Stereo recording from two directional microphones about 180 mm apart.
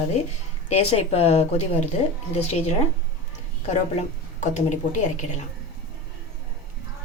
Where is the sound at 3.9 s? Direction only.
40° left (ahead or behind).